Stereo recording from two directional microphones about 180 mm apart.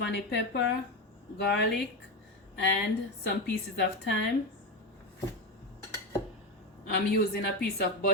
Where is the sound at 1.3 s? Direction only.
70° left (ahead or behind).